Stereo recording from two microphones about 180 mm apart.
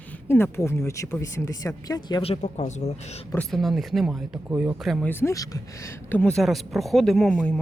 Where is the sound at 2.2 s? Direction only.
35° left (ahead or behind).